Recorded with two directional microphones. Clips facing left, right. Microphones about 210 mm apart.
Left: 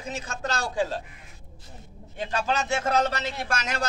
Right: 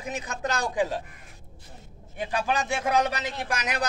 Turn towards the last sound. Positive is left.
turn(degrees=-15)  # may be behind; listen again after turning